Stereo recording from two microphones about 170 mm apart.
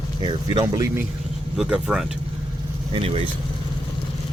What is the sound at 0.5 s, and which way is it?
Speech, 20° right (ahead or behind).